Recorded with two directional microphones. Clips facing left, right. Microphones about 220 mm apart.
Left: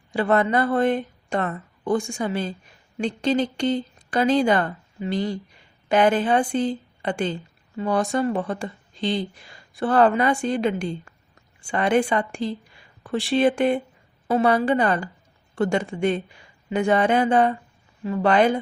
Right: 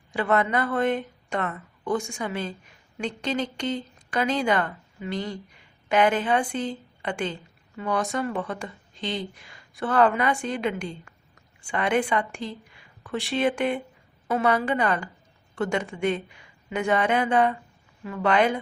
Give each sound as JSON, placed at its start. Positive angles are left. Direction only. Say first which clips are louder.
{"t": 0.1, "sound": "speech", "louder": "left 3 dB", "side_deg": 35}